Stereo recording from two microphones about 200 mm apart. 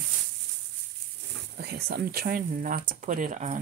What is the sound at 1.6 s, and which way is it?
Speech, 55° right (ahead or behind).